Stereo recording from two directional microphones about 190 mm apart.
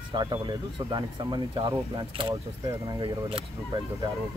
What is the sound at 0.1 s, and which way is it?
Speech, 20° right (ahead or behind).